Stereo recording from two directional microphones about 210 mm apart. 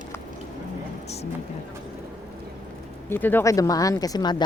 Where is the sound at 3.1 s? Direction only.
10° left (ahead or behind).